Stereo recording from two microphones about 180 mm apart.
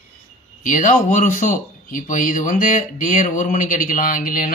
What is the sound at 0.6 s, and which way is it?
Speech, 45° left (ahead or behind).